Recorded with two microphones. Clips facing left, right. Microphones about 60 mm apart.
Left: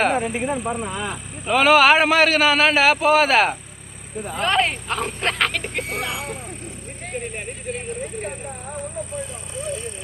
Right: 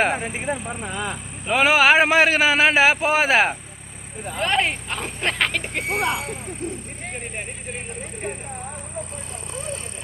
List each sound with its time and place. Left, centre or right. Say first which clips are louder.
0.0 s a man's voice: left 2 dB; centre
4.4 s speech: left 1 dB; centre
5.9 s speech: right 8 dB; right
7.1 s speech: left 4 dB; centre